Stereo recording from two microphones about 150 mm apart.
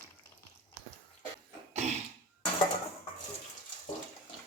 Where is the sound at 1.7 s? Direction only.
50° right (ahead or behind).